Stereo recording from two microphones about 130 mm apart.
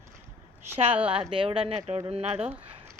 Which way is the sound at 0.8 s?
45° right (ahead or behind).